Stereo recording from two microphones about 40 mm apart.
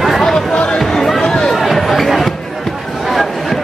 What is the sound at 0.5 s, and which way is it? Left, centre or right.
Music, left.